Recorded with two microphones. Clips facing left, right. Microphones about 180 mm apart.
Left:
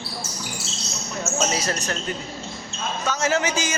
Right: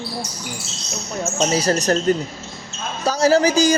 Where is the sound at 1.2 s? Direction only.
30° right (ahead or behind).